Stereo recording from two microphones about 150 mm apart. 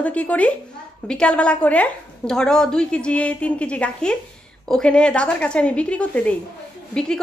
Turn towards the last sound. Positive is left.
turn(degrees=5)  # may be behind; listen again after turning